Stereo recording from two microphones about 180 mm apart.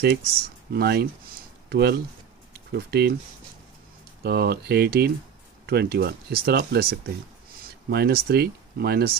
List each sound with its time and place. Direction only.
0.0 s speech: 65° right (ahead or behind)
4.2 s speech: 60° right (ahead or behind)